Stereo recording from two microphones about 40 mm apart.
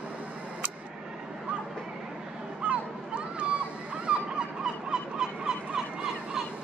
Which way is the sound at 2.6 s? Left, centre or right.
Right.